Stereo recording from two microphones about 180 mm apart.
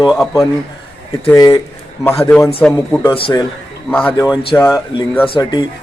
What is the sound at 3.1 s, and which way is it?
Speech, 30° left (ahead or behind).